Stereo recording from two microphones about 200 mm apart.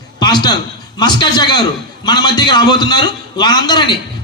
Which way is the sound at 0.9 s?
20° left (ahead or behind).